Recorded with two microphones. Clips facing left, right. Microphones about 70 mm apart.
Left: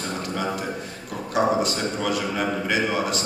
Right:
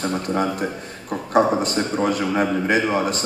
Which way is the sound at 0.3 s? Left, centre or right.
Right.